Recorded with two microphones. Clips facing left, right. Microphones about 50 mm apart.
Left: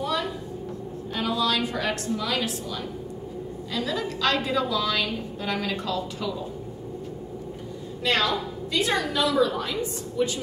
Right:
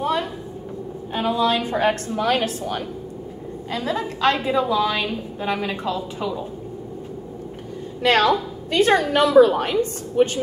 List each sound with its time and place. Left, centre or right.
0.0 s a sound: right
1.1 s a woman's voice: right
3.7 s a woman's voice: right
8.0 s a woman's voice: right